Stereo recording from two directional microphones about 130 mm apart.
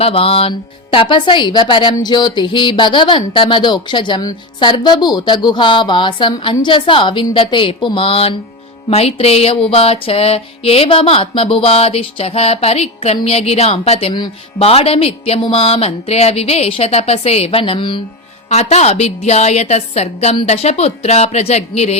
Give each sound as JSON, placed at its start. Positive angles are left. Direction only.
{"t": 0.0, "sound": "speech", "side_deg": 45}
{"t": 8.9, "sound": "music", "side_deg": 50}
{"t": 18.5, "sound": "a woman's voice", "side_deg": 55}